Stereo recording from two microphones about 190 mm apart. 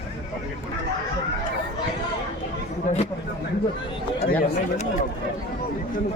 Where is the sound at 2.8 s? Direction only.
35° left (ahead or behind).